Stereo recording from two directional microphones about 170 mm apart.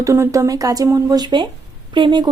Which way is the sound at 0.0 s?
15° right (ahead or behind).